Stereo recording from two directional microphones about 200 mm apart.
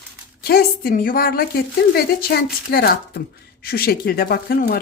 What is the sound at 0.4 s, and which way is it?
Speech, 50° left (ahead or behind).